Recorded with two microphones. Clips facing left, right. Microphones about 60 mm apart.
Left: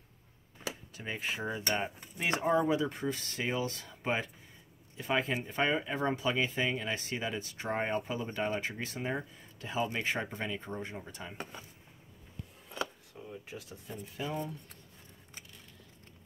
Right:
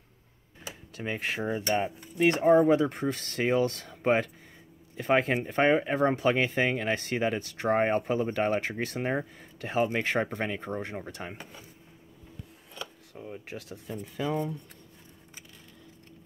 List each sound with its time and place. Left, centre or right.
0.9 s speech: right
1.4 s cutlery: right
2.1 s speech: right
6.1 s speech: right
13.1 s speech: right